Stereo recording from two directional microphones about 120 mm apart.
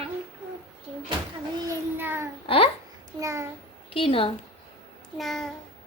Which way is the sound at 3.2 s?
25° right (ahead or behind).